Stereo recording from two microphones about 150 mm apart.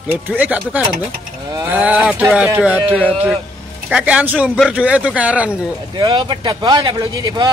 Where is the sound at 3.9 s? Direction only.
5° right (ahead or behind).